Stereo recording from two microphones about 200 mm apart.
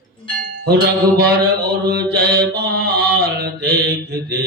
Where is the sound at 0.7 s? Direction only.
55° right (ahead or behind).